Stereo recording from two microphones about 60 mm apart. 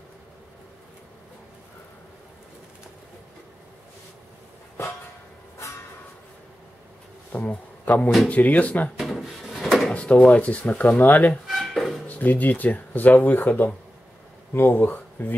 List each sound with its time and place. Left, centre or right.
7.3 s speech: left
9.2 s drawer open or close: centre
9.9 s speech: left
11.4 s a sound: centre
12.1 s speech: left